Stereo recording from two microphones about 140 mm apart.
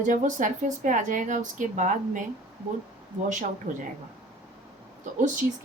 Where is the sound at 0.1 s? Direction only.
65° right (ahead or behind).